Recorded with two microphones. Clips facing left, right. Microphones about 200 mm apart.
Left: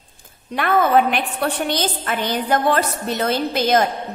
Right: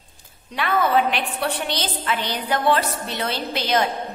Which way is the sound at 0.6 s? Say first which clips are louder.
Left 4 dB; 50° left (ahead or behind).